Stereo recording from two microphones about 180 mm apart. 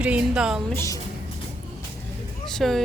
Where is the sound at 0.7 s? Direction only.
15° left (ahead or behind).